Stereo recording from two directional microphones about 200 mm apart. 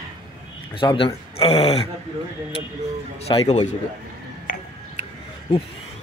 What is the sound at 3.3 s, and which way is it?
Speech, 30° left (ahead or behind).